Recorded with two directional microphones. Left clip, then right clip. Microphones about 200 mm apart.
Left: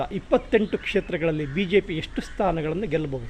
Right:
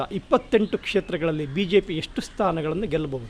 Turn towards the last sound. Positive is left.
turn(degrees=-20)  # may be behind; listen again after turning